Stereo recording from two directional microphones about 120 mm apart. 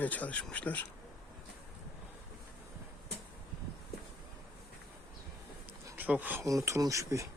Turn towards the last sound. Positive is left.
turn(degrees=-25)  # may be behind; listen again after turning